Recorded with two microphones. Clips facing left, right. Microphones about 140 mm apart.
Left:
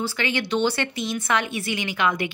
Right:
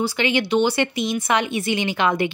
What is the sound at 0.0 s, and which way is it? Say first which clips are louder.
Speech: right 5 dB; 15° right (ahead or behind).